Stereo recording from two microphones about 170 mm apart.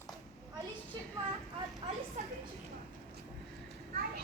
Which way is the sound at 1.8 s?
30° right (ahead or behind).